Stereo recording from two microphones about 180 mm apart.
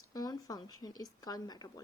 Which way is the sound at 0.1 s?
20° left (ahead or behind).